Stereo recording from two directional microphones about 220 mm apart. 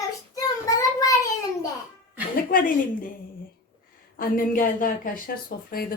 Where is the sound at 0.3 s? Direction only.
15° left (ahead or behind).